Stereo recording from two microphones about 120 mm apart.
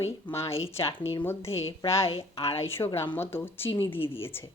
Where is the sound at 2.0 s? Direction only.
55° left (ahead or behind).